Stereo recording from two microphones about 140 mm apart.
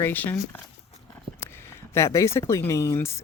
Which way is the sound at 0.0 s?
15° left (ahead or behind).